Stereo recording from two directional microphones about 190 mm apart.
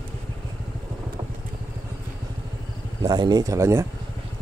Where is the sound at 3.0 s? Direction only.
20° right (ahead or behind).